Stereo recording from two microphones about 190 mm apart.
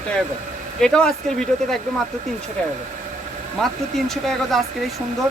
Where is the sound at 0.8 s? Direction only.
5° left (ahead or behind).